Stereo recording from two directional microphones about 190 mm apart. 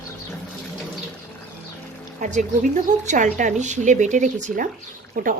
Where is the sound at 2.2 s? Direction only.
40° right (ahead or behind).